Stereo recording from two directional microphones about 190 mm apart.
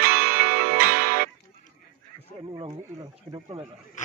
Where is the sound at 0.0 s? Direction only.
50° right (ahead or behind).